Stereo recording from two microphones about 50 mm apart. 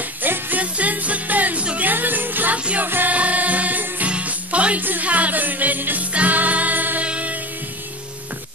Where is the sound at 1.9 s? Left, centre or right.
Right.